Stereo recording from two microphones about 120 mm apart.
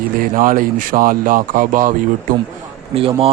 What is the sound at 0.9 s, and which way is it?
Speech, 75° right (ahead or behind).